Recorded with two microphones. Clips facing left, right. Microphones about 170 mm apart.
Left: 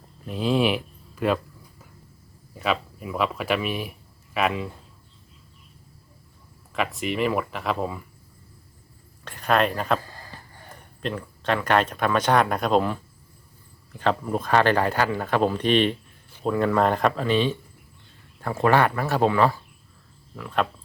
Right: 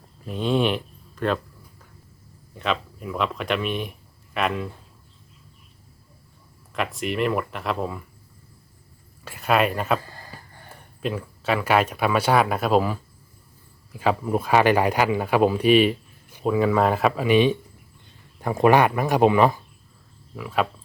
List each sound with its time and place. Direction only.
0.3 s speech: centre (ahead or behind)
2.6 s speech: 5° left (ahead or behind)
6.7 s speech: centre (ahead or behind)
9.2 s speech: 5° right (ahead or behind)
20.3 s speech: 5° right (ahead or behind)